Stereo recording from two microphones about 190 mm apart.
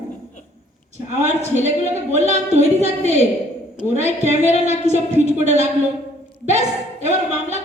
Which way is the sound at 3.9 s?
40° right (ahead or behind).